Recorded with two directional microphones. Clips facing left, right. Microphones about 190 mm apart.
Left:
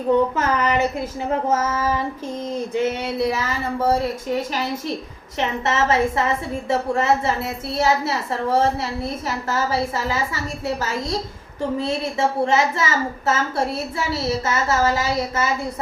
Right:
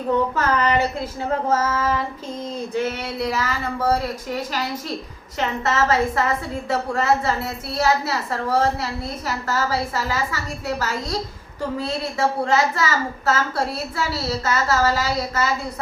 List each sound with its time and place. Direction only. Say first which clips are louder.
0.1 s a woman's voice: left 2 dB; 15° left (ahead or behind)
1.5 s female singing: right 1 dB; 20° left (ahead or behind)
2.8 s a woman's voice: left 3 dB; 20° left (ahead or behind)